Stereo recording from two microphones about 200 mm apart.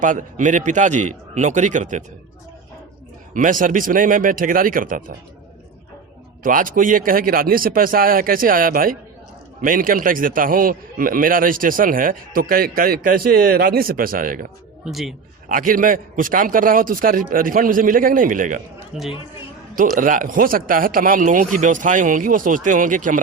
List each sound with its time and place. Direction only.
0.0 s a man's voice: 40° right (ahead or behind)
3.3 s a man's voice: 40° right (ahead or behind)
6.4 s a man's voice: 45° right (ahead or behind)
14.8 s speech: centre (ahead or behind)
15.4 s a man's voice: 45° right (ahead or behind)
18.9 s speech: 5° right (ahead or behind)
20.0 s a man's voice: 40° right (ahead or behind)